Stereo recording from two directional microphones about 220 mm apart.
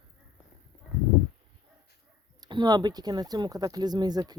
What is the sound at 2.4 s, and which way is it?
Speech, 20° right (ahead or behind).